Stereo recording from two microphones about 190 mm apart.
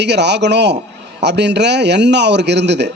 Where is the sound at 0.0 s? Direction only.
65° right (ahead or behind).